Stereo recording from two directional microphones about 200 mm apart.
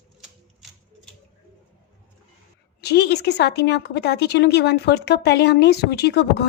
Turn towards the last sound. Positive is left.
turn(degrees=55)  # may be behind; listen again after turning